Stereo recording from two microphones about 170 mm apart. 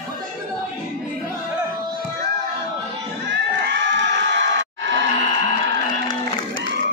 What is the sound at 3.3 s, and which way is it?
Crowd, 90° right.